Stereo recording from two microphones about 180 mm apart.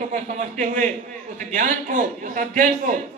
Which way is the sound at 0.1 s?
45° right (ahead or behind).